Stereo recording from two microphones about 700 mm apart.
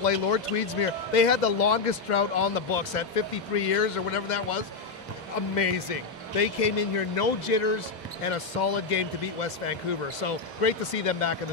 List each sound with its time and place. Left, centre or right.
0.0 s speech: left
8.2 s speech: left